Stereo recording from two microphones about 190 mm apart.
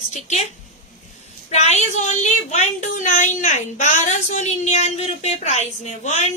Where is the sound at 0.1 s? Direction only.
40° left (ahead or behind).